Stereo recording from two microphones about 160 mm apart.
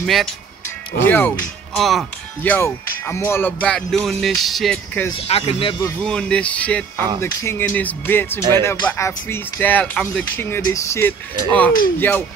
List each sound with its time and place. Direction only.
0.0 s speech: centre (ahead or behind)
1.0 s speech: 10° left (ahead or behind)
1.7 s speech: centre (ahead or behind)
5.1 s speech: 40° left (ahead or behind)
6.0 s speech: 5° left (ahead or behind)